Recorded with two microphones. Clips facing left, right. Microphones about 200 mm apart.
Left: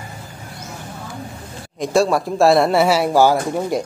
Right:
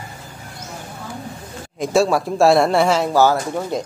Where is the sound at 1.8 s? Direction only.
Centre (ahead or behind).